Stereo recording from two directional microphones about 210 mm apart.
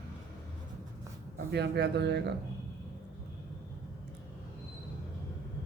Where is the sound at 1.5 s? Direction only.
55° right (ahead or behind).